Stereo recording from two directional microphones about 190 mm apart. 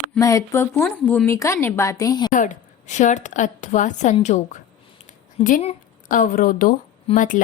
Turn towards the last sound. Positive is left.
turn(degrees=45)  # may be behind; listen again after turning